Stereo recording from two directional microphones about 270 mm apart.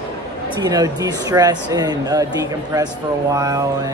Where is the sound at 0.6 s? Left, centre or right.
Centre.